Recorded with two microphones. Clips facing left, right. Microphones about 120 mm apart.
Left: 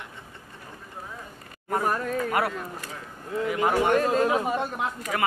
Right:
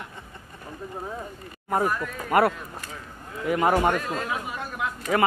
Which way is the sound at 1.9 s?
40° left (ahead or behind).